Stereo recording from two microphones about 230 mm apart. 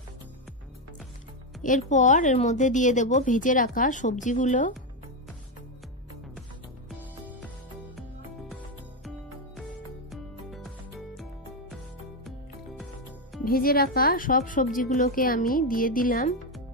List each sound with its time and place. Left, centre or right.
1.6 s a woman's voice: left
6.9 s music: centre
10.1 s music: centre
13.5 s a woman's voice: left